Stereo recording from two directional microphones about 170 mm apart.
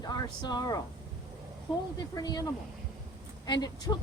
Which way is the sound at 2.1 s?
20° left (ahead or behind).